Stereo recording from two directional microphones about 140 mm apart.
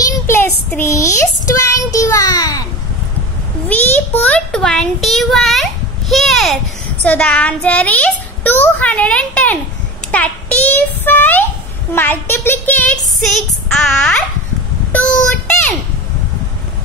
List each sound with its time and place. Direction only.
0.3 s child singing: 15° left (ahead or behind)
3.6 s a child's voice: 10° left (ahead or behind)
10.1 s a sound: 10° left (ahead or behind)
11.9 s speech: 15° left (ahead or behind)
14.9 s child singing: 10° left (ahead or behind)